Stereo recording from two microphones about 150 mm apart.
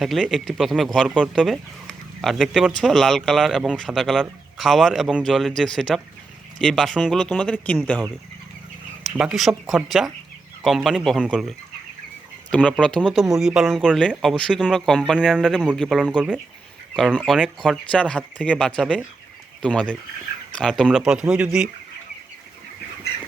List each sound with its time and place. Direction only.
0.0 s speech: centre (ahead or behind)
9.0 s speech: 5° right (ahead or behind)
17.2 s speech: 5° left (ahead or behind)